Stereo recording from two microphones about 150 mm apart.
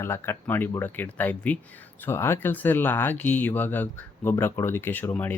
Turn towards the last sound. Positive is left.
turn(degrees=10)  # may be behind; listen again after turning